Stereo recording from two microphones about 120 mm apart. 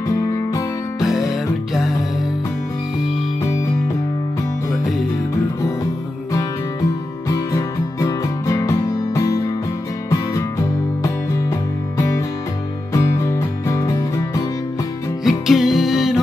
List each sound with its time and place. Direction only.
0.1 s music: 30° left (ahead or behind)
1.0 s music: centre (ahead or behind)
7.2 s music: 30° left (ahead or behind)
11.0 s music: 25° left (ahead or behind)
15.2 s music: 5° right (ahead or behind)